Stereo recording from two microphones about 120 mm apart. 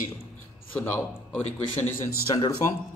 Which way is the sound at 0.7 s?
15° left (ahead or behind).